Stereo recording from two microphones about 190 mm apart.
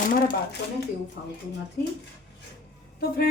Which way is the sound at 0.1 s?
50° left (ahead or behind).